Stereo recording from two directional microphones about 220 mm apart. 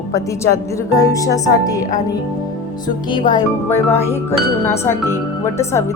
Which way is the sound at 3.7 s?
10° left (ahead or behind).